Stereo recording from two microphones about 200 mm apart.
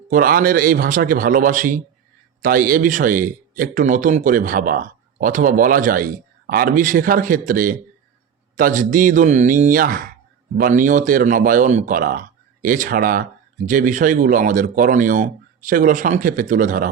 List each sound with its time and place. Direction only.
0.1 s a man's voice: 45° right (ahead or behind)